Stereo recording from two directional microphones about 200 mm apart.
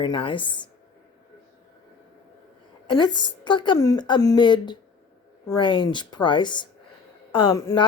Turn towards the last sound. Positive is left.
turn(degrees=25)  # may be behind; listen again after turning